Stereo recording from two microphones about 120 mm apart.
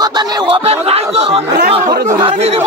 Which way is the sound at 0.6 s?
60° right (ahead or behind).